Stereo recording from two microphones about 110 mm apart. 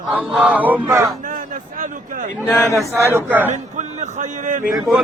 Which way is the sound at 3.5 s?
90° right.